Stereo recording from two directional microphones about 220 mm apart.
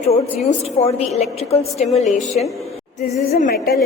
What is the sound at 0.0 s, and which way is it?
A woman's voice, 30° left (ahead or behind).